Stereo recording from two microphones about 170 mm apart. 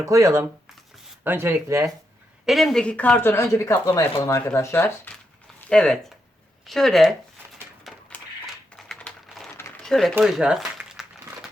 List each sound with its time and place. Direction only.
0.0 s speech: 20° right (ahead or behind)
2.5 s speech: centre (ahead or behind)
7.9 s a sound: centre (ahead or behind)
8.7 s typing: 5° left (ahead or behind)
9.6 s a sound: 5° left (ahead or behind)
10.2 s speech: 5° right (ahead or behind)